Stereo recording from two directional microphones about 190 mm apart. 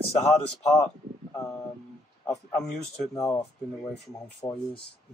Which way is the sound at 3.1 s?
15° left (ahead or behind).